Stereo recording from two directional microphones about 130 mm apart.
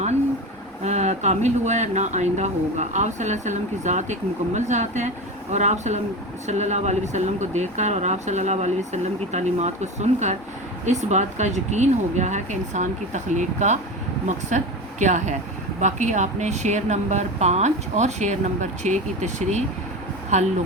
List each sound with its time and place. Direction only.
0.9 s speech: 60° right (ahead or behind)